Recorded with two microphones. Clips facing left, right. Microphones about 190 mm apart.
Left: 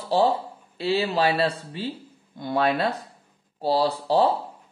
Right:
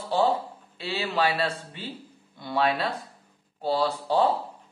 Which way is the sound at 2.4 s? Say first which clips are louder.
Left 3 dB; 45° left (ahead or behind).